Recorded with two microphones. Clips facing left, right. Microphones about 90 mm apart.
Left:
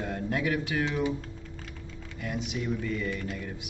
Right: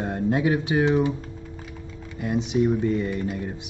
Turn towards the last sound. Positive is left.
turn(degrees=-25)  # may be behind; listen again after turning